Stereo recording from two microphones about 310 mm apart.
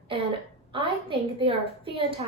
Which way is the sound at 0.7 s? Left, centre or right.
Centre.